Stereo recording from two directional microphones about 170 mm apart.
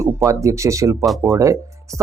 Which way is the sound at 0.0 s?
20° right (ahead or behind).